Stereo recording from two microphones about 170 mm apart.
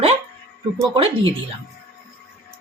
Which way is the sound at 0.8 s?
30° right (ahead or behind).